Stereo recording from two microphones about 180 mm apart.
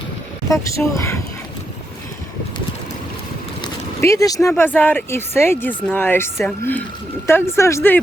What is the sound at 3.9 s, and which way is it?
Speech, 15° left (ahead or behind).